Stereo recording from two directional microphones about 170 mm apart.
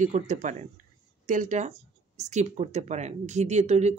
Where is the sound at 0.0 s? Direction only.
45° right (ahead or behind).